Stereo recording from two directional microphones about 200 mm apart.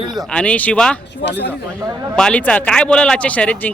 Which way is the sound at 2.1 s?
5° left (ahead or behind).